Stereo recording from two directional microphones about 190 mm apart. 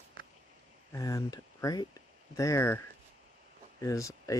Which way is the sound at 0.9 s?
15° left (ahead or behind).